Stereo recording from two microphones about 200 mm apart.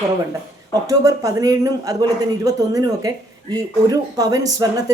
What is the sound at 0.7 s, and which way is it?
A woman's voice, 15° right (ahead or behind).